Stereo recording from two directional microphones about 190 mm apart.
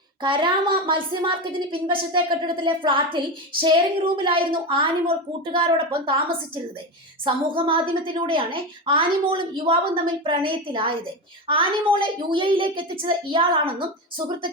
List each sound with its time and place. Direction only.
0.2 s a woman's voice: 25° right (ahead or behind)
7.3 s a woman's voice: 25° right (ahead or behind)